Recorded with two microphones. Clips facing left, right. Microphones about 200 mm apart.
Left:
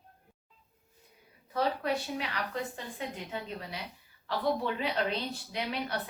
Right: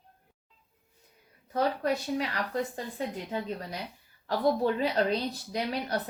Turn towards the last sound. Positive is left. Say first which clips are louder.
# right 3 dB
turn(degrees=-40)  # may be behind; listen again after turning